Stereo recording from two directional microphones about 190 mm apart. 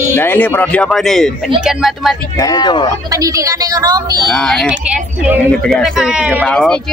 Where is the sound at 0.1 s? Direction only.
10° left (ahead or behind).